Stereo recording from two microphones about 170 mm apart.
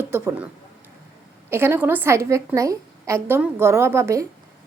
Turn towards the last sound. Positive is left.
turn(degrees=-20)  # may be behind; listen again after turning